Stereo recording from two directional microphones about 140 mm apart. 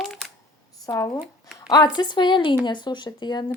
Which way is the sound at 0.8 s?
25° left (ahead or behind).